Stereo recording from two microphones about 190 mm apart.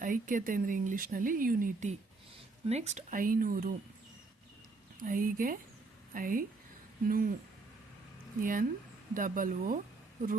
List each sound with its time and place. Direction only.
0.0 s speech: 45° right (ahead or behind)
5.0 s speech: 45° right (ahead or behind)
8.4 s speech: 45° right (ahead or behind)